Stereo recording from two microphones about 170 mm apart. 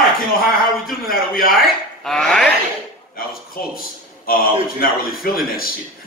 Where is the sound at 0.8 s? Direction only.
60° left (ahead or behind).